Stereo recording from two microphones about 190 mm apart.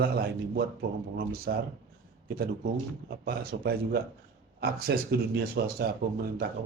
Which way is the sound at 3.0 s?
50° right (ahead or behind).